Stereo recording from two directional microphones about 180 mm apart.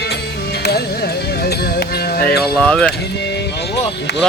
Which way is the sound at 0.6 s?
60° left (ahead or behind).